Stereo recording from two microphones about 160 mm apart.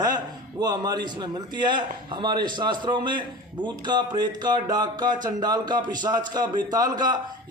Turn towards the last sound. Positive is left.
turn(degrees=-25)  # may be behind; listen again after turning